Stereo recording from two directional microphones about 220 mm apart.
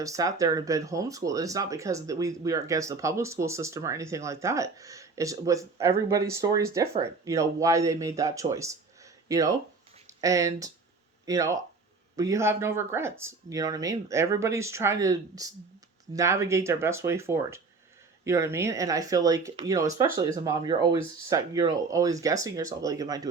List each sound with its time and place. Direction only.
0.0 s speech: 15° right (ahead or behind)